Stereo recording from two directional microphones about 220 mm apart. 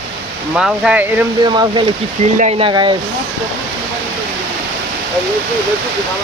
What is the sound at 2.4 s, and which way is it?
Speech, 25° right (ahead or behind).